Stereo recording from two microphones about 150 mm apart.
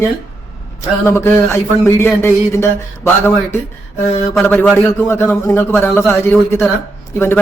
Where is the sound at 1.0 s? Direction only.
15° left (ahead or behind).